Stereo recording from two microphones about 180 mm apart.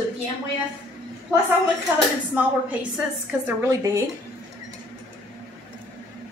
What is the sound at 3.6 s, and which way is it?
Speech, 15° right (ahead or behind).